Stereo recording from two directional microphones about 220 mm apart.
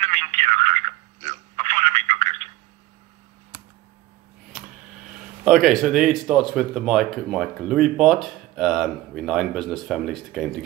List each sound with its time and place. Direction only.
0.0 s telephone: 30° right (ahead or behind)
5.4 s speech: centre (ahead or behind)